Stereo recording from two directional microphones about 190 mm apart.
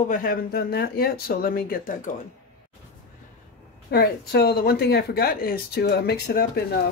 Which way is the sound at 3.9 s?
55° left (ahead or behind).